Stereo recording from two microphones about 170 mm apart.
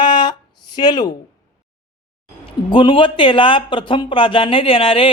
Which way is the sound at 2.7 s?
30° left (ahead or behind).